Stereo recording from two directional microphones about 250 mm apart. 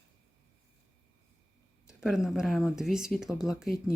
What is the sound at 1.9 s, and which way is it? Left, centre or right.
Speech, centre.